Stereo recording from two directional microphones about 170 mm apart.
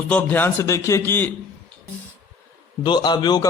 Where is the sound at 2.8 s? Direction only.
25° left (ahead or behind).